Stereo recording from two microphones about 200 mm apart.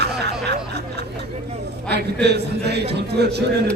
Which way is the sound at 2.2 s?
55° right (ahead or behind).